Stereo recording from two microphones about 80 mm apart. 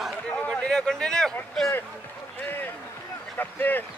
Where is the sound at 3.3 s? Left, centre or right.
Left.